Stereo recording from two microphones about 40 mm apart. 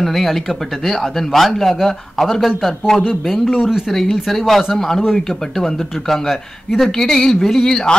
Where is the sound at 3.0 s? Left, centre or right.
Centre.